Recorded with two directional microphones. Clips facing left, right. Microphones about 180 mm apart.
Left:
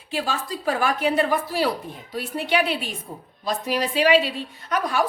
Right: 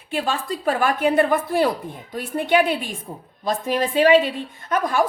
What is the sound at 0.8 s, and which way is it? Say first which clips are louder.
A woman's voice: right 3 dB; 55° right (ahead or behind).